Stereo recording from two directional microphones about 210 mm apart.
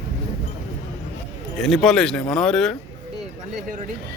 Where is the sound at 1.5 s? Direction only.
Centre (ahead or behind).